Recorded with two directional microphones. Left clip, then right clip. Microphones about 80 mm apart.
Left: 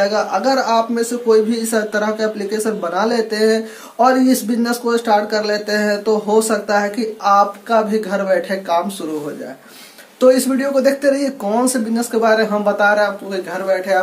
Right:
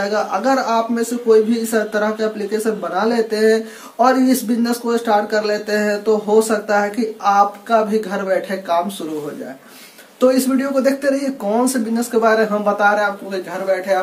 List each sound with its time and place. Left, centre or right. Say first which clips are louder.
0.0 s a man's voice: left 2 dB; centre
10.2 s speech: left 3 dB; centre
12.7 s speech: left 2 dB; centre